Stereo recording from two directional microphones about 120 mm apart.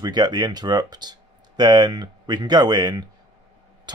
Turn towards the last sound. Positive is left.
turn(degrees=-35)  # may be behind; listen again after turning